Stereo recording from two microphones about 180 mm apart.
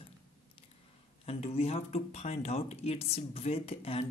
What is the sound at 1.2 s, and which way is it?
Speech, 35° left (ahead or behind).